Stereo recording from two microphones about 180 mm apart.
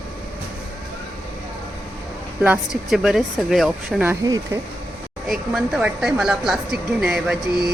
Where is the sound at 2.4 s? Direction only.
5° right (ahead or behind).